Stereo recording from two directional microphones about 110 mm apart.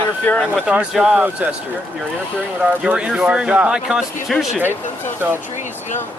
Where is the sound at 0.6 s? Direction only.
10° right (ahead or behind).